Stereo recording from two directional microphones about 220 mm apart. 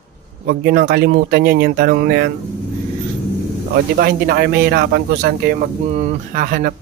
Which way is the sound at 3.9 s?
40° right (ahead or behind).